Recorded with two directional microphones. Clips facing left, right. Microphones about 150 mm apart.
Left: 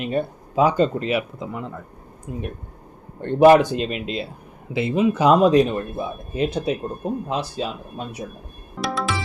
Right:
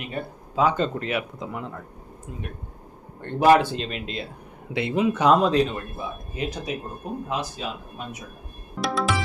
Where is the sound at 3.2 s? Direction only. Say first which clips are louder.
Left 5 dB; 20° left (ahead or behind).